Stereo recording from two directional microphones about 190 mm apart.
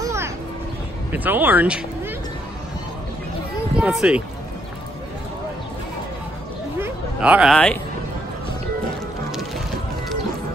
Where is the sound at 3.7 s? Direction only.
5° right (ahead or behind).